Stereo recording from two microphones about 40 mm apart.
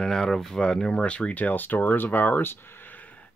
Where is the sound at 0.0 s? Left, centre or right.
Centre.